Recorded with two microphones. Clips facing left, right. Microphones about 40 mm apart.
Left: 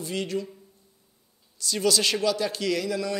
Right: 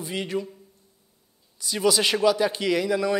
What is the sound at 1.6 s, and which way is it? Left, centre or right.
A man's voice, centre.